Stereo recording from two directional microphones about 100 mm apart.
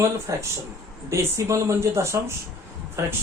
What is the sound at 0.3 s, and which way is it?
Speech, 35° right (ahead or behind).